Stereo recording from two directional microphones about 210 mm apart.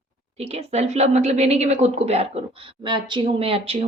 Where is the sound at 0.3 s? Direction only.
30° right (ahead or behind).